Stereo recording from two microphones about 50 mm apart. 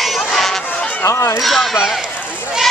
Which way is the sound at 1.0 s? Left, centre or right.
Left.